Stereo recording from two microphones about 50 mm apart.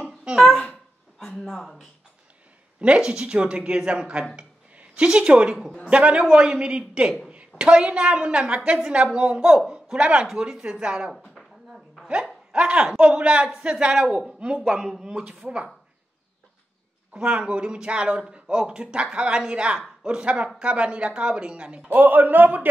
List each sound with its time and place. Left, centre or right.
0.0 s babbling: right
1.4 s speech: centre
2.8 s a woman's voice: right
4.4 s a sound: right
5.9 s a woman's voice: right
11.2 s a sound: centre
12.5 s a woman's voice: right
17.1 s a woman's voice: right
21.8 s a man's voice: right